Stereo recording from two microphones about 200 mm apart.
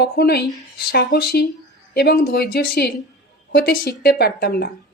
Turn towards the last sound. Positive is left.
turn(degrees=50)  # may be behind; listen again after turning